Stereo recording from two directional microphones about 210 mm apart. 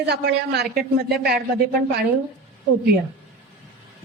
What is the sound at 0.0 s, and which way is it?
Speech, 50° right (ahead or behind).